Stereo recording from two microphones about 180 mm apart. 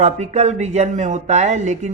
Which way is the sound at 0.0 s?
40° right (ahead or behind).